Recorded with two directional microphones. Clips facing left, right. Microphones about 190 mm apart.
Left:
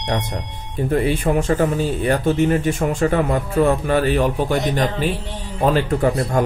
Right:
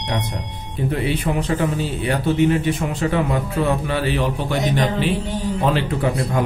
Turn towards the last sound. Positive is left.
turn(degrees=45)  # may be behind; listen again after turning